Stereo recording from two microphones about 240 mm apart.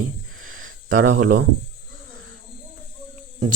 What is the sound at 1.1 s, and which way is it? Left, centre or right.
Speech, right.